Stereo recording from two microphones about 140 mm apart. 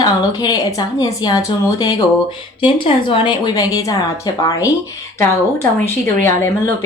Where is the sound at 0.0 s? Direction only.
30° left (ahead or behind).